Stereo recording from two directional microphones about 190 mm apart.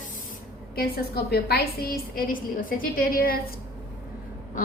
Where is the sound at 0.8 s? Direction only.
55° left (ahead or behind).